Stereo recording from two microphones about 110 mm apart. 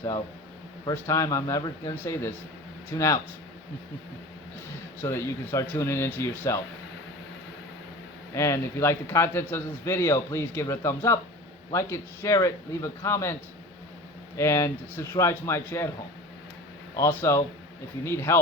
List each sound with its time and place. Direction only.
0.9 s a man's voice: 30° left (ahead or behind)
5.0 s a man's voice: 25° left (ahead or behind)
8.4 s a man's voice: 25° left (ahead or behind)
14.3 s a man's voice: 25° left (ahead or behind)
17.0 s a man's voice: 20° left (ahead or behind)